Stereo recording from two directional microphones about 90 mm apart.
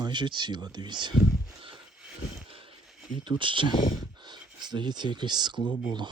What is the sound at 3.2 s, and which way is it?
Speech, 65° right (ahead or behind).